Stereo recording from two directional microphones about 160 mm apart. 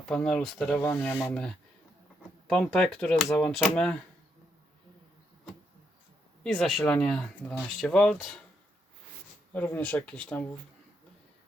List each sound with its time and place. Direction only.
0.1 s speech: 5° left (ahead or behind)
6.4 s speech: 5° left (ahead or behind)
9.5 s speech: 10° left (ahead or behind)